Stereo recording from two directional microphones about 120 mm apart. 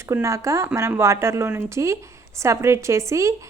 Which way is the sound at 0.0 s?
25° right (ahead or behind).